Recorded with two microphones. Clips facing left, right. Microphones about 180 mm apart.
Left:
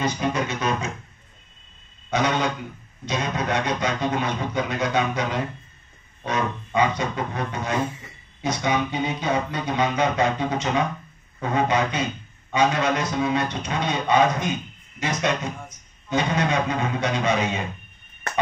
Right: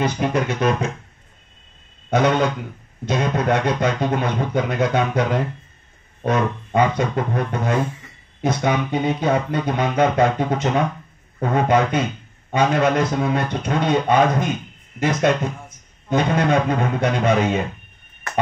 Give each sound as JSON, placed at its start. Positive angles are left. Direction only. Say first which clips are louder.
{"t": 0.0, "sound": "music", "louder": "right 4 dB", "side_deg": -55}
{"t": 2.0, "sound": "a man's voice", "louder": "right 5 dB", "side_deg": -55}